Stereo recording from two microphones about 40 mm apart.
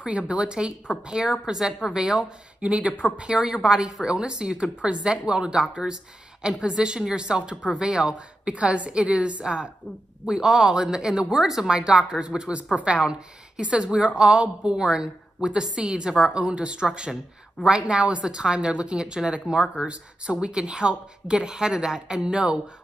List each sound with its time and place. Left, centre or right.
0.0 s a woman's voice: right
1.7 s speech: centre
2.0 s speech: centre
2.6 s speech: right
3.2 s a woman's voice: centre
8.5 s a woman's voice: right